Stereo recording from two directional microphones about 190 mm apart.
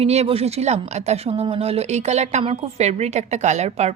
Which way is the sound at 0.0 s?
35° right (ahead or behind).